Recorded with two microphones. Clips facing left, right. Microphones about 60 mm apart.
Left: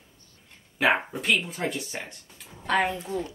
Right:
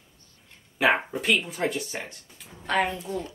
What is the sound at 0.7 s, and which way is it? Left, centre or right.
A woman's voice, centre.